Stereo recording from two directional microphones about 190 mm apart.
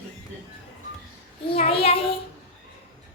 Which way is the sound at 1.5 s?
30° left (ahead or behind).